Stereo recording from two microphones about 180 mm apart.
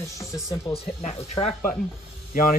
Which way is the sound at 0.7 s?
35° left (ahead or behind).